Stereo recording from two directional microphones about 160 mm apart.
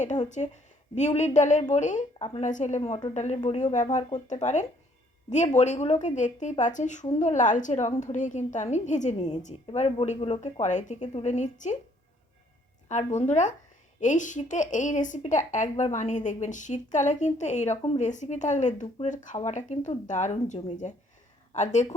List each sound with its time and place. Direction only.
0.0 s a woman's voice: 45° left (ahead or behind)
12.9 s a woman's voice: 45° left (ahead or behind)